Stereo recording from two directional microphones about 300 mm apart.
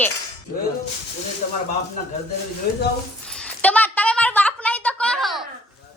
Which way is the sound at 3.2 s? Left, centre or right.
Centre.